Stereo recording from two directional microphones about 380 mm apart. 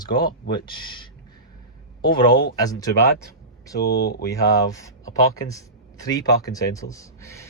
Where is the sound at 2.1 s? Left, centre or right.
Left.